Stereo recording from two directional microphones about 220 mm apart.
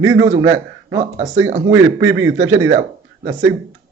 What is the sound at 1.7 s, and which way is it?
A man's voice, 65° right (ahead or behind).